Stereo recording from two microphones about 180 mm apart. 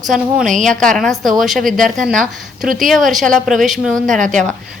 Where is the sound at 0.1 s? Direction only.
Centre (ahead or behind).